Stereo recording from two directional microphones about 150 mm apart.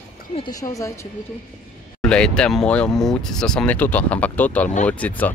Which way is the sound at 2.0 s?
5° left (ahead or behind).